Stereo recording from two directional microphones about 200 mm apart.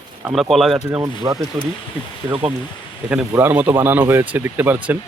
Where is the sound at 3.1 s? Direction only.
10° right (ahead or behind).